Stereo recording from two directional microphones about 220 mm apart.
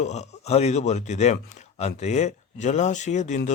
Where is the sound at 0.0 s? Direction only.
30° left (ahead or behind).